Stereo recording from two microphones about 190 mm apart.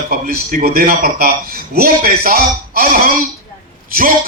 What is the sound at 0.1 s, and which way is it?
A man's voice, 50° right (ahead or behind).